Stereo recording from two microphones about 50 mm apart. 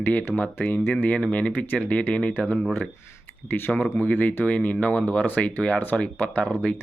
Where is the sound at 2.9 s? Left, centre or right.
Left.